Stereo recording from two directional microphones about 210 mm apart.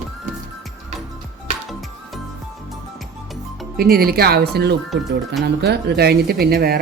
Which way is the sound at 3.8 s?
45° right (ahead or behind).